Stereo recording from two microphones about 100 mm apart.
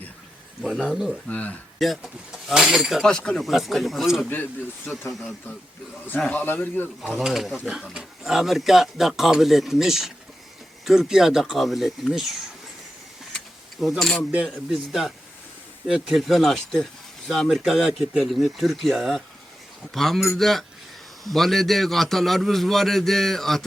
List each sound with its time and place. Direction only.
0.6 s speech: 5° right (ahead or behind)
1.3 s speech: 15° left (ahead or behind)
1.8 s speech: centre (ahead or behind)
6.4 s a man's voice: 20° left (ahead or behind)
7.0 s speech: centre (ahead or behind)
13.8 s speech: centre (ahead or behind)